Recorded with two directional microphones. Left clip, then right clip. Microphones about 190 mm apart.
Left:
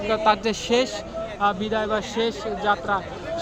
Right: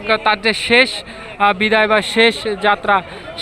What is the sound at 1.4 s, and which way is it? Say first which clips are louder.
A man's voice: right 10 dB; 20° right (ahead or behind).